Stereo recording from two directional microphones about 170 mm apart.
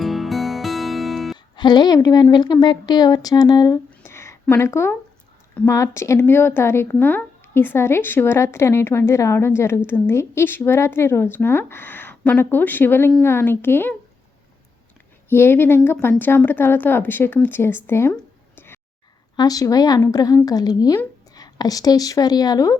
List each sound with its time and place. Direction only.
0.0 s music: centre (ahead or behind)
1.5 s speech: 25° left (ahead or behind)
3.8 s a sound: 15° left (ahead or behind)
5.5 s speech: 15° left (ahead or behind)
15.3 s speech: 15° left (ahead or behind)